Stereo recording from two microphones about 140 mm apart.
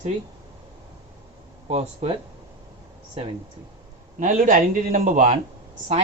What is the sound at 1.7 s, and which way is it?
Speech, 50° right (ahead or behind).